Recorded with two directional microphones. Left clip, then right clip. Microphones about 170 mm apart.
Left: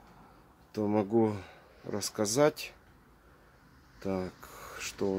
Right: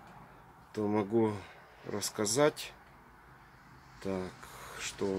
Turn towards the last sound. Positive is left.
turn(degrees=10)  # may be behind; listen again after turning